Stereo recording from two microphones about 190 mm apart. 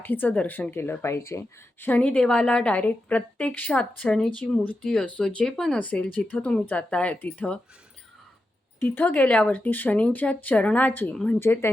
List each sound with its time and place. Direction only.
0.0 s a woman's voice: 10° left (ahead or behind)
8.8 s a woman's voice: 10° left (ahead or behind)